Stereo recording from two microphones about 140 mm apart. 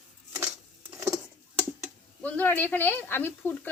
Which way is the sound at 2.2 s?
10° left (ahead or behind).